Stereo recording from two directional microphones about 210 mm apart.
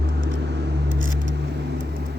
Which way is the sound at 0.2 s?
60° right (ahead or behind).